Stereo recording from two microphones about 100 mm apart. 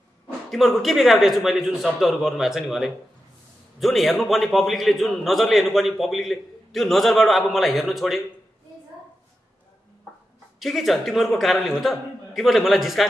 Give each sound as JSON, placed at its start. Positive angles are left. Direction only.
{"t": 0.5, "sound": "a man's voice", "side_deg": 0}
{"t": 10.6, "sound": "a man's voice", "side_deg": 0}